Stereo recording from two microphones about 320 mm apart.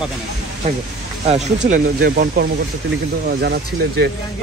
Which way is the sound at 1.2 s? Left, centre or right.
Right.